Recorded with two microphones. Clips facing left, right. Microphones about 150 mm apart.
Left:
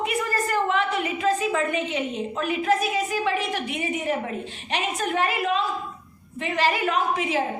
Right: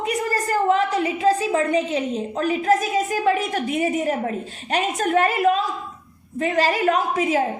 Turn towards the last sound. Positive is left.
turn(degrees=-45)  # may be behind; listen again after turning